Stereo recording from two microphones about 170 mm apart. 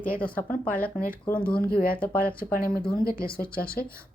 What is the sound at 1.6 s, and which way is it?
Speech, 65° left (ahead or behind).